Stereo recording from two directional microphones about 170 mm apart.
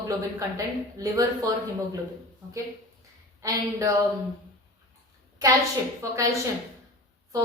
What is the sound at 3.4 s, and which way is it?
Speech, 20° right (ahead or behind).